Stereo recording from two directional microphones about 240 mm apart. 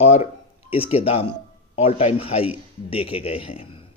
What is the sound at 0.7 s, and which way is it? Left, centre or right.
Speech, left.